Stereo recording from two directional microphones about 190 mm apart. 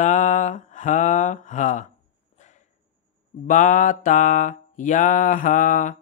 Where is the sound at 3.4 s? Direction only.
40° left (ahead or behind).